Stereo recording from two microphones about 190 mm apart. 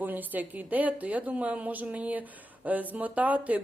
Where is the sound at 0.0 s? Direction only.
10° right (ahead or behind).